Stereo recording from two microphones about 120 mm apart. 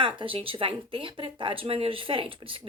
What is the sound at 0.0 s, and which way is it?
Speech, 45° right (ahead or behind).